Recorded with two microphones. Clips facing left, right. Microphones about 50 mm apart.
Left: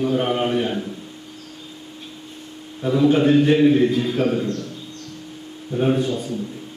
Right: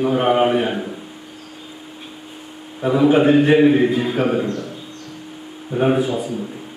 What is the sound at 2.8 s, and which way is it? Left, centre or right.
A man's voice, right.